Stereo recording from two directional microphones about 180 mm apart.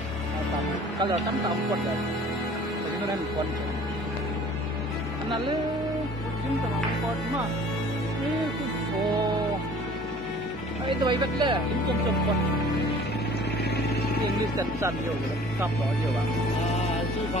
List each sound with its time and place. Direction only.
10.9 s speech: 25° right (ahead or behind)
14.6 s speech: 20° right (ahead or behind)